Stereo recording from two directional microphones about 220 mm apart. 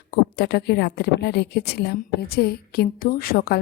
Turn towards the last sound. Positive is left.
turn(degrees=40)  # may be behind; listen again after turning